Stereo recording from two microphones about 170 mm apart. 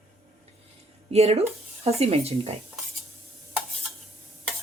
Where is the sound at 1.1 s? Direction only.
40° right (ahead or behind).